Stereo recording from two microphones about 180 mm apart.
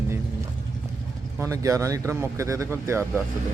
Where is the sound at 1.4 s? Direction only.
15° right (ahead or behind).